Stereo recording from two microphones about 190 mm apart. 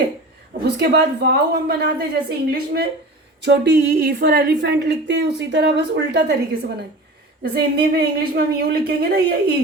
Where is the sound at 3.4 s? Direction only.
65° right (ahead or behind).